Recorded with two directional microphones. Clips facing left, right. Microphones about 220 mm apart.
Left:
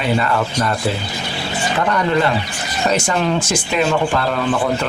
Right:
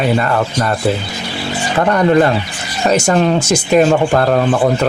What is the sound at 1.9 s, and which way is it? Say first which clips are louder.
Speech: right 7 dB; 45° right (ahead or behind).